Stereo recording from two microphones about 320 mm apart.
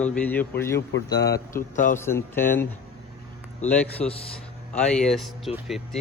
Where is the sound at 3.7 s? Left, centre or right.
Centre.